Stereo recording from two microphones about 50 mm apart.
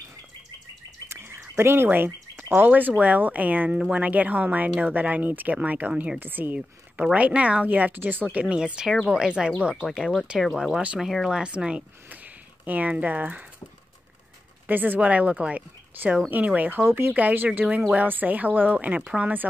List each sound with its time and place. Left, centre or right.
1.0 s frog: right
2.5 s speech: right
3.7 s speech: right
8.5 s speech: centre
9.9 s speech: centre
11.2 s speech: centre
12.6 s speech: right
14.7 s speech: right